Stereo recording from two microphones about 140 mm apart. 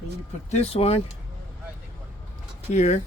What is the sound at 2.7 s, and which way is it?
Speech, 55° left (ahead or behind).